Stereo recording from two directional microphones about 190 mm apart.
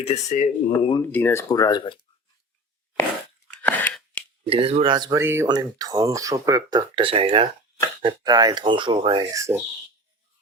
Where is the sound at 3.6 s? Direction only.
10° left (ahead or behind).